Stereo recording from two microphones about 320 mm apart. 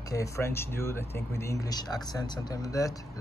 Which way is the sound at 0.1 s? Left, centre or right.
Centre.